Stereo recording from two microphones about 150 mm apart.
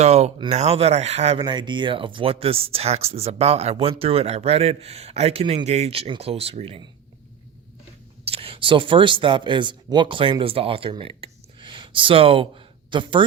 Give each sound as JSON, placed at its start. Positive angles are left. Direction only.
{"t": 0.0, "sound": "speech", "side_deg": -45}
{"t": 1.4, "sound": "speech", "side_deg": -30}
{"t": 8.3, "sound": "speech", "side_deg": -35}